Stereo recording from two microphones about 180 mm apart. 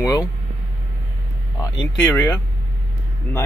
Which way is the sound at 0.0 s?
15° left (ahead or behind).